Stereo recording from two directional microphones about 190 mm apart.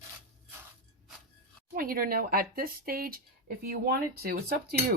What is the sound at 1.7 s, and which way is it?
Speech, 50° right (ahead or behind).